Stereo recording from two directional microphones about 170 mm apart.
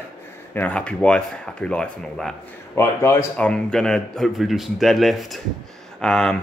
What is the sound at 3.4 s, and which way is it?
Speech, 5° left (ahead or behind).